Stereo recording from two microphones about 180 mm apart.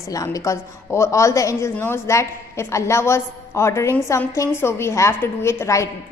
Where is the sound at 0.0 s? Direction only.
20° left (ahead or behind).